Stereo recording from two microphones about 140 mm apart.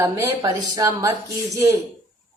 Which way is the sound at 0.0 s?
25° right (ahead or behind).